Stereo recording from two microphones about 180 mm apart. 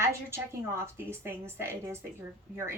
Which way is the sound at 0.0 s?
15° right (ahead or behind).